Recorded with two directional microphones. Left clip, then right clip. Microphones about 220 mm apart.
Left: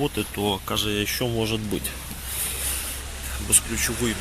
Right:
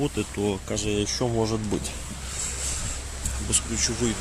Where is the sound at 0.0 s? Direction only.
5° right (ahead or behind).